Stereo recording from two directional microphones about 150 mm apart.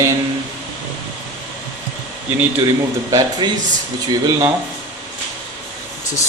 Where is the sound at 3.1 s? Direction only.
30° right (ahead or behind).